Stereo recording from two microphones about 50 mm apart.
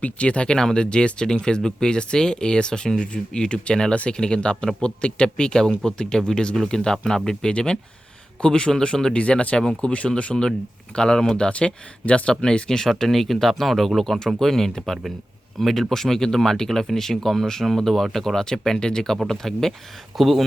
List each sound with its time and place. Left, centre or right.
0.0 s speech: left; by 20.4 s centre